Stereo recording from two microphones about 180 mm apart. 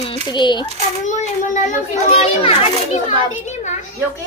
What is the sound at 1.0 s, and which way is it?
A child's voice, 40° left (ahead or behind).